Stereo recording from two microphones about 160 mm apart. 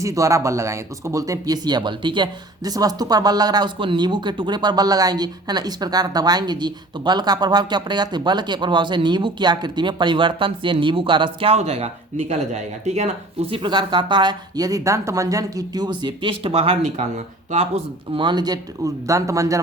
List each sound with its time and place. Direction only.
0.0 s speech: 20° right (ahead or behind); by 13.1 s 45° right (ahead or behind)
13.5 s speech: 30° right (ahead or behind)